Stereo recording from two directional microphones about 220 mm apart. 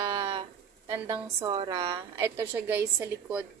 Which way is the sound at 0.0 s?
15° right (ahead or behind).